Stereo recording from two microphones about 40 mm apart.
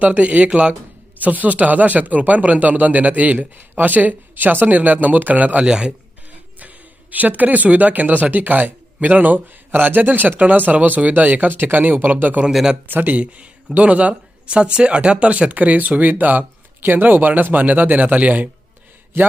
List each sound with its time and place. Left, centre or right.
0.0 s speech: right
1.2 s speech: right
5.6 s a man's voice: right
6.6 s speech: right
19.1 s a man's voice: right